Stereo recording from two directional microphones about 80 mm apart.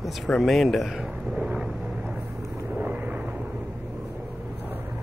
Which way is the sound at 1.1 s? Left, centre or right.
Centre.